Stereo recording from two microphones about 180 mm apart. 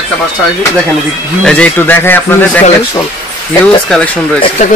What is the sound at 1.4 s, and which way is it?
Speech, 5° left (ahead or behind).